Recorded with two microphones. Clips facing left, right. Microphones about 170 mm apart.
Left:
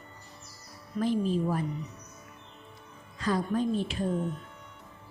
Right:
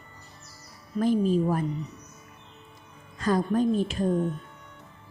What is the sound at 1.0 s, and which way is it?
Speech, 45° right (ahead or behind).